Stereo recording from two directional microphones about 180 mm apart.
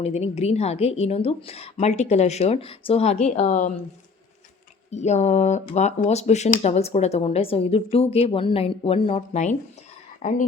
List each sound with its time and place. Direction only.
0.0 s speech: 35° left (ahead or behind)
4.9 s speech: 40° left (ahead or behind)